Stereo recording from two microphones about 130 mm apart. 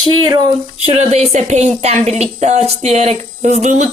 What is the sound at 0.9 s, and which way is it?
Speech, 55° right (ahead or behind).